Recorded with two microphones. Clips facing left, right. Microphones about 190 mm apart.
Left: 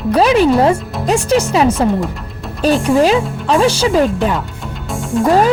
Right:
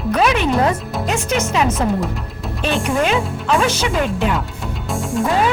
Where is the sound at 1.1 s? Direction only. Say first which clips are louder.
Left 7 dB; 35° left (ahead or behind).